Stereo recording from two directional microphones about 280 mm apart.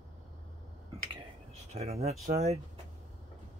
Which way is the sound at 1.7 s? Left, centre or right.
Right.